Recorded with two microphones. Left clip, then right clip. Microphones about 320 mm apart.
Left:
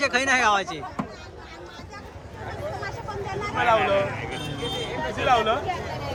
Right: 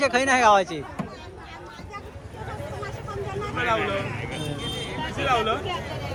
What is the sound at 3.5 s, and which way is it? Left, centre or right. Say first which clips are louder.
Speech: left 5 dB; left.